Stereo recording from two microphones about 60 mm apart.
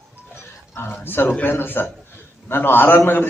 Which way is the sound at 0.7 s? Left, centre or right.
Left.